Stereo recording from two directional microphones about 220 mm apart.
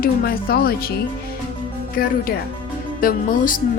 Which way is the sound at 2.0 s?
40° left (ahead or behind).